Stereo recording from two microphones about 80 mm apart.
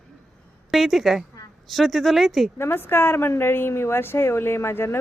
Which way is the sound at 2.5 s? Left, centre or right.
Left.